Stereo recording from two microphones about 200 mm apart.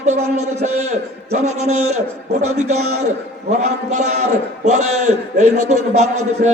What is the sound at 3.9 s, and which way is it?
A man's voice, 35° right (ahead or behind).